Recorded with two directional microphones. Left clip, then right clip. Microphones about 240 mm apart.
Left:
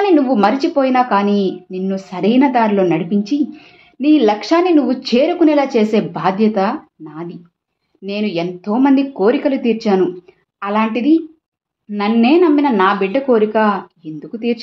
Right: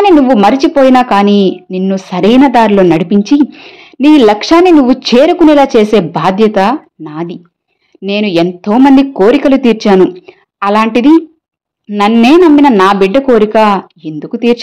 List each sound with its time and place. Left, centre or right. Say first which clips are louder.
0.0 s a woman's voice: right 7 dB; right